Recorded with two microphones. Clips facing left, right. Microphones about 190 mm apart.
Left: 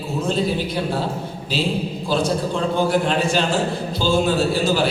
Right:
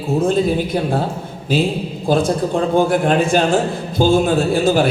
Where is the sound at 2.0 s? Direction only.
50° right (ahead or behind).